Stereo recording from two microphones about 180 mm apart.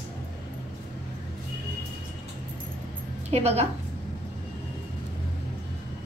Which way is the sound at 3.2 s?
35° right (ahead or behind).